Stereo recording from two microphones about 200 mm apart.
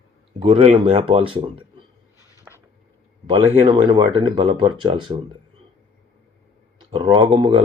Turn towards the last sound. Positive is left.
turn(degrees=-25)  # may be behind; listen again after turning